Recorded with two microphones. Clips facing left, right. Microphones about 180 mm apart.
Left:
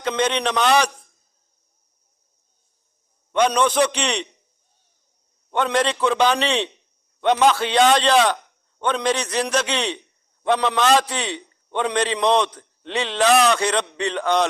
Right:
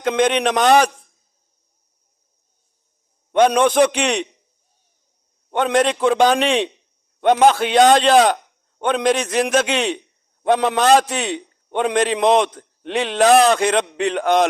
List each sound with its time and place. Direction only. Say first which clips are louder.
0.0 s a man's voice: right 5 dB; 55° right (ahead or behind)
3.3 s a man's voice: right 4 dB; 50° right (ahead or behind)
5.5 s a man's voice: right 4 dB; 50° right (ahead or behind)